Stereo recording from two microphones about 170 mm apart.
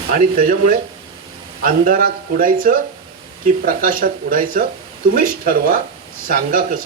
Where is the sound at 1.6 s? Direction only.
55° right (ahead or behind).